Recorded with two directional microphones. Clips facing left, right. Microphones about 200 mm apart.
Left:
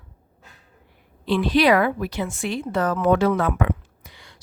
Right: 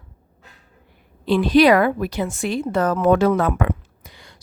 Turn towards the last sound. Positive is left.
turn(degrees=-40)  # may be behind; listen again after turning